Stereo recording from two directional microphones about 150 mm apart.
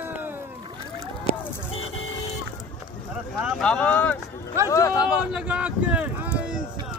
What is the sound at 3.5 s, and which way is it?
Speech, 5° left (ahead or behind).